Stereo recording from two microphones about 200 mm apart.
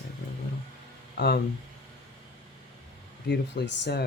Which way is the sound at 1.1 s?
55° left (ahead or behind).